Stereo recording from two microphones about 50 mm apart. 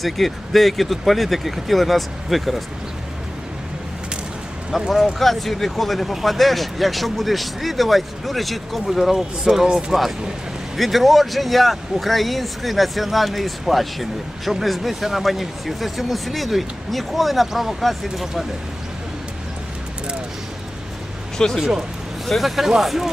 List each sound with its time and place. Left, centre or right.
0.0 s speech: centre
4.7 s speech: centre
10.8 s speech: centre
21.3 s speech: centre
21.6 s speech: centre